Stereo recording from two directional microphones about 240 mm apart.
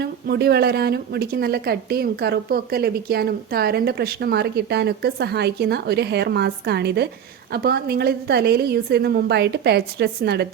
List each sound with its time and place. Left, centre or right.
0.0 s a woman's voice: right